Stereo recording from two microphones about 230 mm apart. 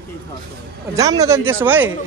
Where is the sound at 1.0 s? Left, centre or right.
Centre.